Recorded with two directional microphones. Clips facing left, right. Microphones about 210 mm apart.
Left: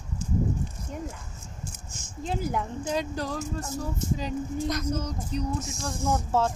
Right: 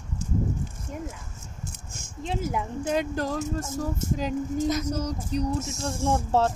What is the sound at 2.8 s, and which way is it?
Speech, 55° right (ahead or behind).